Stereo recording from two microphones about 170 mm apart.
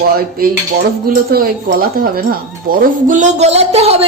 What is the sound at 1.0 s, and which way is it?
Speech, 60° right (ahead or behind).